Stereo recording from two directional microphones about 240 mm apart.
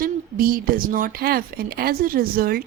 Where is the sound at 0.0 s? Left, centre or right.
Right.